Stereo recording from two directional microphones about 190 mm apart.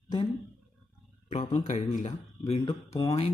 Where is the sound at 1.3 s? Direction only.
35° left (ahead or behind).